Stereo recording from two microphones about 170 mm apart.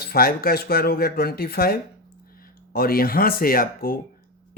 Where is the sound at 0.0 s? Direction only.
60° left (ahead or behind).